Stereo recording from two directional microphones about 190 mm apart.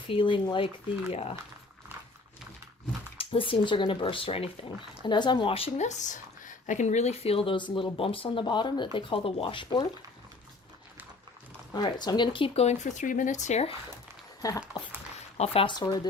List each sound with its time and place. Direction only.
0.1 s speech: 25° left (ahead or behind)
3.2 s speech: 30° left (ahead or behind)
11.7 s speech: 20° left (ahead or behind)
14.6 s speech: 5° right (ahead or behind)
15.4 s speech: 30° left (ahead or behind)